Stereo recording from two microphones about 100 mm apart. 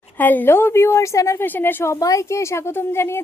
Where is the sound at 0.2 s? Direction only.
20° left (ahead or behind).